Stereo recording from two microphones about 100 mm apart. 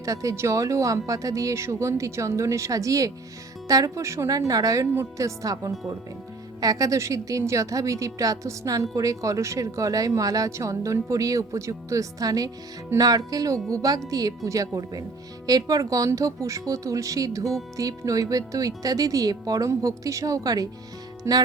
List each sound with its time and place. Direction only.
0.0 s a woman's voice: 35° right (ahead or behind)
21.2 s music: 30° right (ahead or behind)